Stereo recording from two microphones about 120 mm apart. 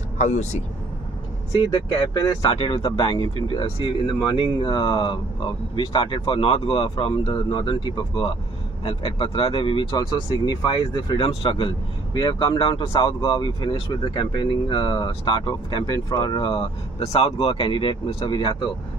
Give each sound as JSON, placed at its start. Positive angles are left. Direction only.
{"t": 0.2, "sound": "speech", "side_deg": 75}
{"t": 1.5, "sound": "speech", "side_deg": 40}
{"t": 2.4, "sound": "speech", "side_deg": 50}